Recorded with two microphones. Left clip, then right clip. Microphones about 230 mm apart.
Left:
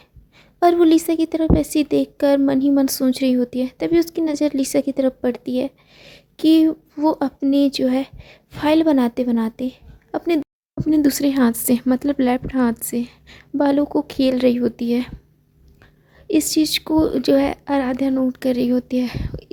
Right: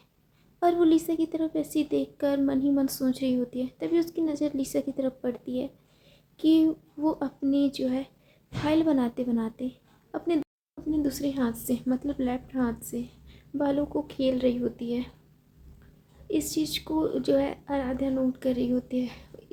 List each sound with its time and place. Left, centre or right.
0.6 s a woman's voice: left
16.3 s a woman's voice: left